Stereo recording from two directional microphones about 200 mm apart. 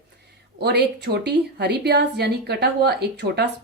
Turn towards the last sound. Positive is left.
turn(degrees=-55)  # may be behind; listen again after turning